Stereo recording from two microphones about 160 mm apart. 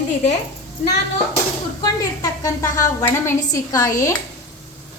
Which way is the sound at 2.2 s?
20° left (ahead or behind).